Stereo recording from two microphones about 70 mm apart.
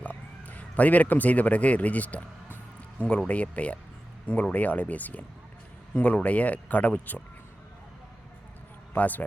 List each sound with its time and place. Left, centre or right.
0.0 s speech: left
3.2 s speech: centre
9.0 s speech: left